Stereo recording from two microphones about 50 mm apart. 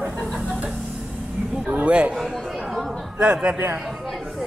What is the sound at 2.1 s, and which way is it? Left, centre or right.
Speech, centre.